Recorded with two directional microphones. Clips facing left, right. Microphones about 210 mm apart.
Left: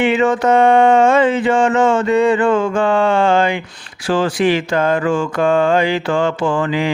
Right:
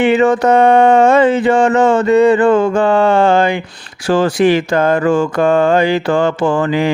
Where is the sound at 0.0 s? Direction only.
40° right (ahead or behind).